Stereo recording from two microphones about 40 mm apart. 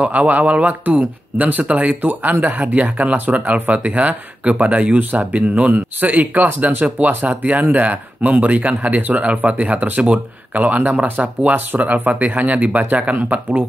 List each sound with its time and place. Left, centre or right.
0.0 s speech: right
5.7 s speech: right